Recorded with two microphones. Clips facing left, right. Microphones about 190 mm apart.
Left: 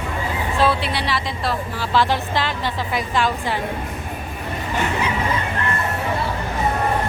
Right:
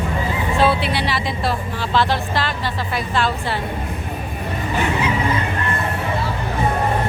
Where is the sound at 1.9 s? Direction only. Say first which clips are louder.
Even; 15° left (ahead or behind).